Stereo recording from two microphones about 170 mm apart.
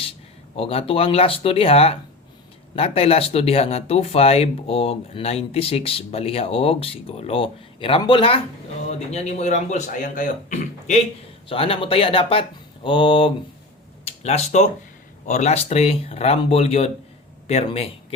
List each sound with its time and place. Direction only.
0.5 s a man's voice: 35° left (ahead or behind)
11.4 s speech: 30° left (ahead or behind)